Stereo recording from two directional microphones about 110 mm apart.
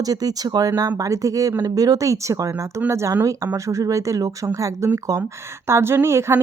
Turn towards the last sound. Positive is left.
turn(degrees=-25)  # may be behind; listen again after turning